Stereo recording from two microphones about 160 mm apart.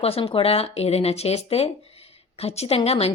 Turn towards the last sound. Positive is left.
turn(degrees=40)  # may be behind; listen again after turning